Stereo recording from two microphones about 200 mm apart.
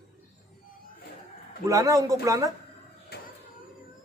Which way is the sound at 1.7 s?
15° right (ahead or behind).